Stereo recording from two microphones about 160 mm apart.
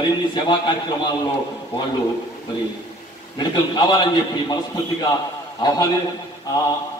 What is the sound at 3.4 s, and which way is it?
A man's voice, 25° left (ahead or behind).